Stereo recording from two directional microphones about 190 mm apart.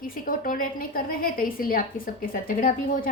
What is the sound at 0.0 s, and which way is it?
A woman's voice, 45° left (ahead or behind).